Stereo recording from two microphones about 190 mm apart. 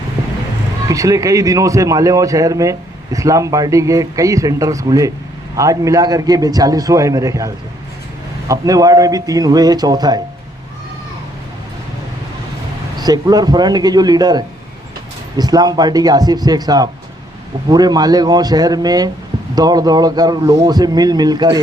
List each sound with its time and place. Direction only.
0.9 s a man's voice: 15° right (ahead or behind)
13.0 s a man's voice: 20° right (ahead or behind)